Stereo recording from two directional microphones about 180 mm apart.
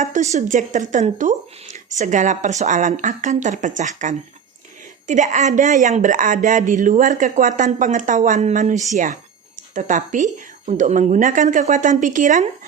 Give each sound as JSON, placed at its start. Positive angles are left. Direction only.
{"t": 0.0, "sound": "speech", "side_deg": -40}